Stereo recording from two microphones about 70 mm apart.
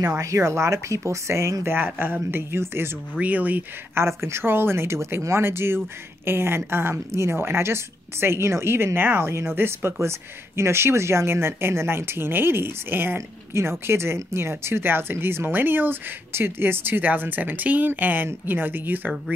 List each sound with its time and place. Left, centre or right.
0.0 s speech: right
3.2 s speech: right
3.9 s speech: right